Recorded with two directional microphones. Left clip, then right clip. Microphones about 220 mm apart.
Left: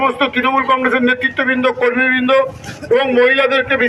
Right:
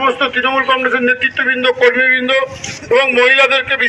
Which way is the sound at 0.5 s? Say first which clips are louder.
Even; 35° left (ahead or behind).